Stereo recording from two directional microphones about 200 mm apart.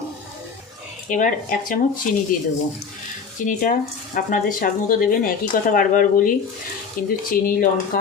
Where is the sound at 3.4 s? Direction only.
40° left (ahead or behind).